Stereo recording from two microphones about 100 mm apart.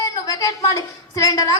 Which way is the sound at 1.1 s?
35° left (ahead or behind).